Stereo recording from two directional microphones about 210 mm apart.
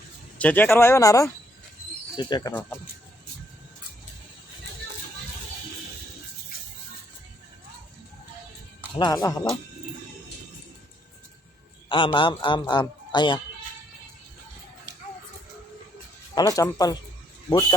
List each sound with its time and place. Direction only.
0.3 s a man's voice: 5° left (ahead or behind)
2.5 s speech: 10° left (ahead or behind)
9.0 s speech: 20° left (ahead or behind)
11.9 s a man's voice: 25° left (ahead or behind)
16.3 s a man's voice: 15° left (ahead or behind)